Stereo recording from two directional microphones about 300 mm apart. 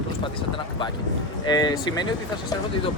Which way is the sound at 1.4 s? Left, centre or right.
Centre.